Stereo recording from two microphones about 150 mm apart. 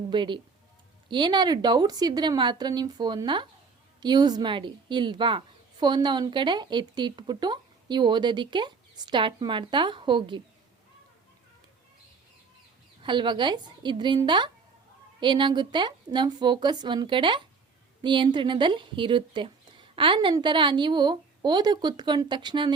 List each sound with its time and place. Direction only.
0.1 s a woman's voice: 30° right (ahead or behind)
13.0 s speech: 30° right (ahead or behind)